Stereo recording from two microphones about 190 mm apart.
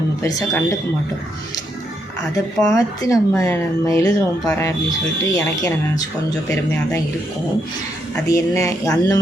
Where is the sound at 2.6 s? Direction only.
20° left (ahead or behind).